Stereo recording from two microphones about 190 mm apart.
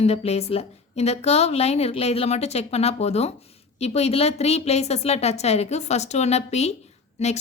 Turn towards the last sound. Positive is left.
turn(degrees=35)  # may be behind; listen again after turning